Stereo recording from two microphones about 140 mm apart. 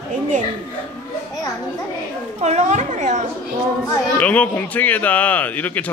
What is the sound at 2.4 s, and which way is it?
Speech, 50° right (ahead or behind).